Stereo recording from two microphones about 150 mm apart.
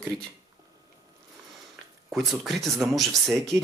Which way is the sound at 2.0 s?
Centre (ahead or behind).